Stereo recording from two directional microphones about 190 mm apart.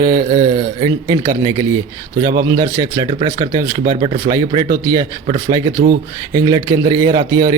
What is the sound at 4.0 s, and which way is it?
Speech, 30° right (ahead or behind).